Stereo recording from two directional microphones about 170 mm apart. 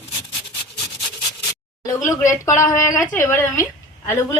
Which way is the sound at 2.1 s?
15° left (ahead or behind).